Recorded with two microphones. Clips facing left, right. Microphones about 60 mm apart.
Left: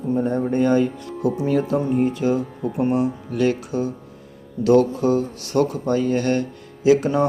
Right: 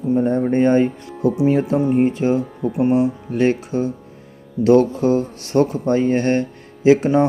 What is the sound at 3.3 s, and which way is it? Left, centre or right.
Speech, right.